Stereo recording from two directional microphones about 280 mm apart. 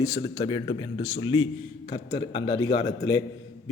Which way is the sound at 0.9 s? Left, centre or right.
Left.